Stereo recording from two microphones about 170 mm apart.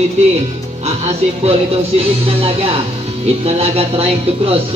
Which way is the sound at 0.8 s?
40° right (ahead or behind).